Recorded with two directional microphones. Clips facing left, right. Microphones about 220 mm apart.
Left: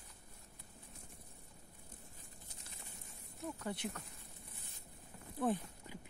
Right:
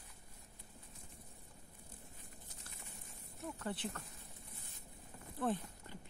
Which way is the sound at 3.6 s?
10° left (ahead or behind).